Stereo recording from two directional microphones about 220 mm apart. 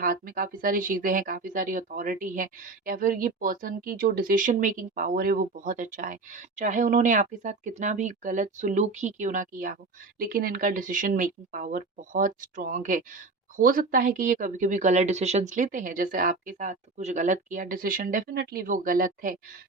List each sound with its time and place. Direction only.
0.0 s speech: 40° right (ahead or behind)